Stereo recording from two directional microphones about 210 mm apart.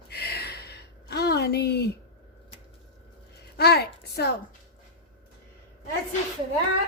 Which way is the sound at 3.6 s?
50° left (ahead or behind).